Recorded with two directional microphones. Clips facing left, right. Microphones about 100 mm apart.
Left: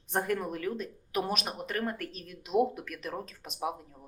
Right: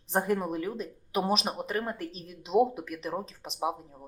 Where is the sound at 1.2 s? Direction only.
30° right (ahead or behind).